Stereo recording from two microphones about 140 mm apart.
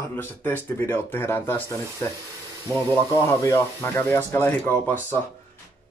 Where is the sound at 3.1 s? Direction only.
20° left (ahead or behind).